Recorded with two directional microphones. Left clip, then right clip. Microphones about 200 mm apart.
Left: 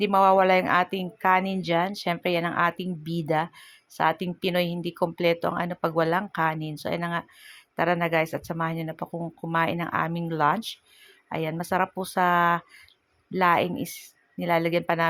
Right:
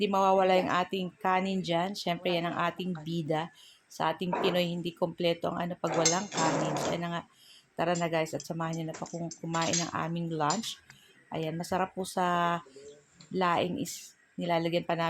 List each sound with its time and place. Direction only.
0.0 s speech: 15° left (ahead or behind)